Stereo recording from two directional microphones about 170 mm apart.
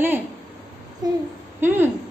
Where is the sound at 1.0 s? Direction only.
20° right (ahead or behind).